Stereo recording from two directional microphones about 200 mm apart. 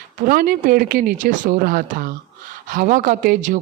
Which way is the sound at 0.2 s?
45° right (ahead or behind).